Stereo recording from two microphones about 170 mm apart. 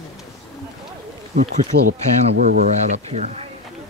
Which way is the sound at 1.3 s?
45° right (ahead or behind).